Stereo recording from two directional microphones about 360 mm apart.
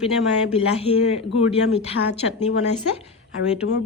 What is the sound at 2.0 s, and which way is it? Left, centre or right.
Speech, left.